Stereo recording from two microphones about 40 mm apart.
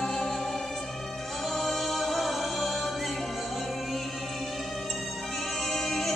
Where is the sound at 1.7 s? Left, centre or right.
Centre.